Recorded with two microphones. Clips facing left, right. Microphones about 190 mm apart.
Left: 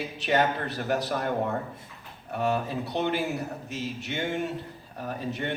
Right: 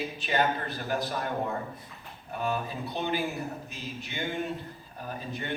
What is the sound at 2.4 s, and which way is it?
A man's voice, 75° left (ahead or behind).